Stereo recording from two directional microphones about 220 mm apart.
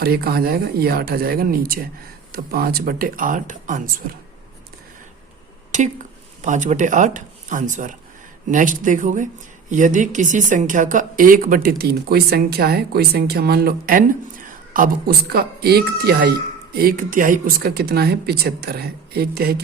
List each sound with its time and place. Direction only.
0.0 s speech: 45° right (ahead or behind)
6.4 s speech: 35° right (ahead or behind)